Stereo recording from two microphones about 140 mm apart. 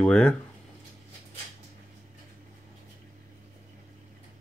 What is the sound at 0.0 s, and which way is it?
Speech, 5° left (ahead or behind).